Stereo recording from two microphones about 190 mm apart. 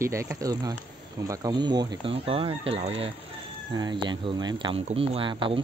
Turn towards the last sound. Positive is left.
turn(degrees=-25)  # may be behind; listen again after turning